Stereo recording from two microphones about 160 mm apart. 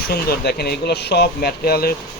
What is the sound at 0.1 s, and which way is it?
Speech, 75° left (ahead or behind).